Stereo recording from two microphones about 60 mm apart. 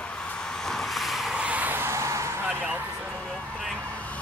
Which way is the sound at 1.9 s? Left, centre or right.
Right.